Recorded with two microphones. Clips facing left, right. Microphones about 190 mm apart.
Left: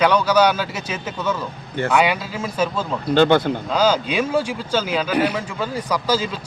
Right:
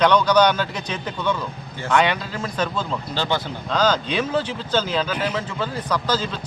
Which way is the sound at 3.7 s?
10° left (ahead or behind).